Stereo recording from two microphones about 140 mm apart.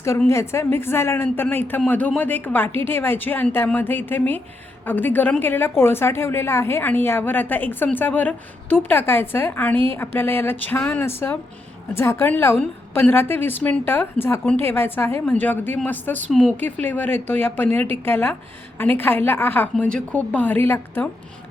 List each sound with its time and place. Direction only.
0.0 s a woman's voice: 20° left (ahead or behind)